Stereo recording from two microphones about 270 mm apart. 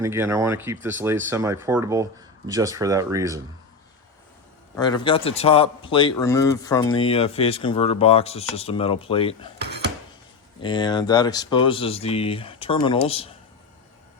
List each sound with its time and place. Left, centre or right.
0.0 s speech: centre
4.8 s a man's voice: centre
9.6 s a sound: right
10.6 s a man's voice: centre